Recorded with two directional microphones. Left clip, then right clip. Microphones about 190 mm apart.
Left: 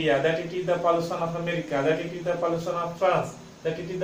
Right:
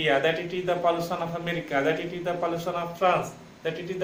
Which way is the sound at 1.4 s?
30° right (ahead or behind).